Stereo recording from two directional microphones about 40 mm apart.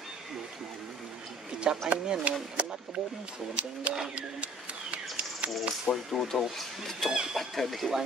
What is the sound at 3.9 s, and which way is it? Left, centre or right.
Speech, right.